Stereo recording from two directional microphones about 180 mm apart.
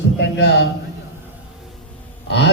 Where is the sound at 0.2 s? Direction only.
70° left (ahead or behind).